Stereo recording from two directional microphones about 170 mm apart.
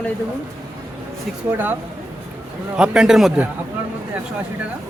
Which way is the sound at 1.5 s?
10° right (ahead or behind).